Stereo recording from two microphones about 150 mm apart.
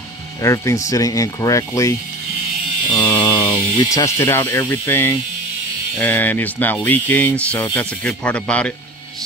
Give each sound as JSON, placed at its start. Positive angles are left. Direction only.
{"t": 0.4, "sound": "speech", "side_deg": 20}
{"t": 3.0, "sound": "speech", "side_deg": 30}